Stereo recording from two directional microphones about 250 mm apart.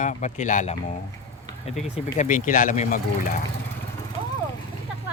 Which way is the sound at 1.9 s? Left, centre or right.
Left.